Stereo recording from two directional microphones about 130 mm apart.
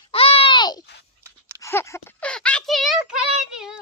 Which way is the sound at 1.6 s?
20° left (ahead or behind).